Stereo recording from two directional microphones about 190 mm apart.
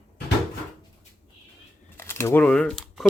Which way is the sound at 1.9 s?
15° left (ahead or behind).